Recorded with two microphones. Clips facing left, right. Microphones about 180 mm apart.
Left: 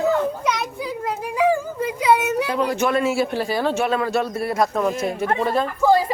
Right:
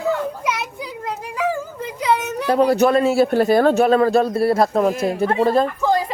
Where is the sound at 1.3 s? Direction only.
10° left (ahead or behind).